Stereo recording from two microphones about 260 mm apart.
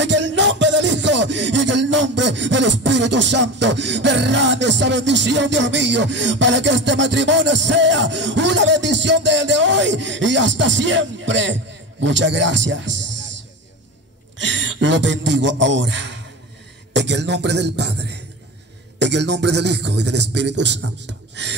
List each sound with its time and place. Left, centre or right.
0.0 s music: right
14.4 s a man's voice: right